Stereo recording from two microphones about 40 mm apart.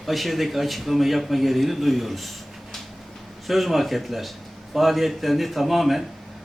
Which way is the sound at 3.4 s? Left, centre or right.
Centre.